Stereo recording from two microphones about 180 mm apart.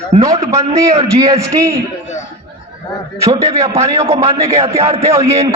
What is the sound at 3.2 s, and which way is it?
Speech, 15° right (ahead or behind).